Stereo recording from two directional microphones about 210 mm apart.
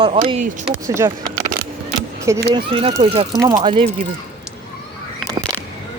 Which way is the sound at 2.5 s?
25° right (ahead or behind).